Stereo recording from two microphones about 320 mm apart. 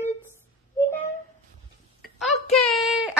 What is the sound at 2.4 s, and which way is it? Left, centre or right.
Child singing, centre.